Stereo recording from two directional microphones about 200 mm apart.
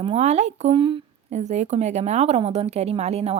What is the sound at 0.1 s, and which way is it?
A woman's voice, 35° right (ahead or behind).